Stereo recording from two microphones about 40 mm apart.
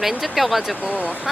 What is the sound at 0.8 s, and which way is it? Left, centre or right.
Speech, right.